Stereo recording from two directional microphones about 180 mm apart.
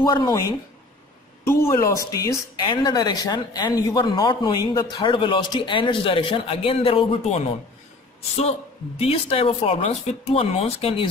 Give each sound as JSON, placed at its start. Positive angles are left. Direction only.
{"t": 0.1, "sound": "a woman's voice", "side_deg": 20}